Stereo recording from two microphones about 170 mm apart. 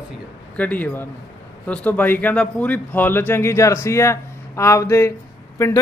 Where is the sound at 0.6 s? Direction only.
10° left (ahead or behind).